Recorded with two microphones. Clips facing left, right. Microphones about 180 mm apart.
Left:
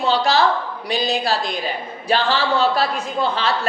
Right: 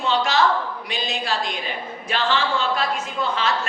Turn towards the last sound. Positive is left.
turn(degrees=35)  # may be behind; listen again after turning